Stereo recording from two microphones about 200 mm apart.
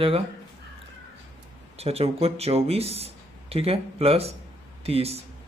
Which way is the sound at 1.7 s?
30° right (ahead or behind).